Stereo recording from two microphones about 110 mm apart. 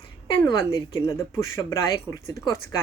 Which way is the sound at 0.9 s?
25° left (ahead or behind).